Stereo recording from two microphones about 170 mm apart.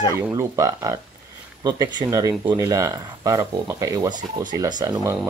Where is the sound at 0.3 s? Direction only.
20° right (ahead or behind).